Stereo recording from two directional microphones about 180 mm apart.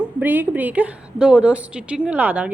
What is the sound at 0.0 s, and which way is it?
A woman's voice, 10° right (ahead or behind).